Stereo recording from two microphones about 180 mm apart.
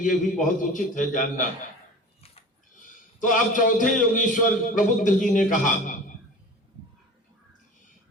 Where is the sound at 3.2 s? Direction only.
45° left (ahead or behind).